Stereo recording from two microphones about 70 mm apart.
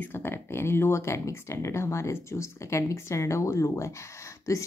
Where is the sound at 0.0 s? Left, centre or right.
Left.